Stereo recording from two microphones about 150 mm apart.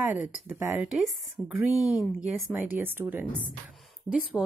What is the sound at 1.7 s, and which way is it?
Speech, 20° left (ahead or behind).